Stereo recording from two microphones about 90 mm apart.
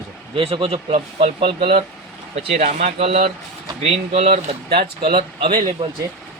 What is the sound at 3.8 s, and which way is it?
Speech, 90° right.